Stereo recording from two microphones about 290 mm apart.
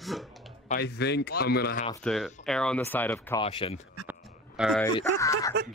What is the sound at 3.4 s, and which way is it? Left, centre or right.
Speech, centre.